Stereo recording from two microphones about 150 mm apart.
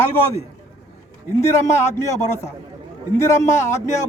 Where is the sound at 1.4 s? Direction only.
20° left (ahead or behind).